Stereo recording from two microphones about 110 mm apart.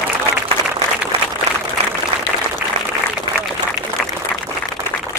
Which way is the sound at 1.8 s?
65° right (ahead or behind).